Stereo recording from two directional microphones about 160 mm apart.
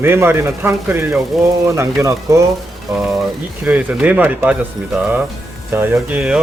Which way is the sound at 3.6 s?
5° right (ahead or behind).